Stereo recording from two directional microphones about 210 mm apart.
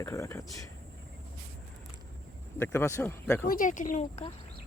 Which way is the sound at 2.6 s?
10° left (ahead or behind).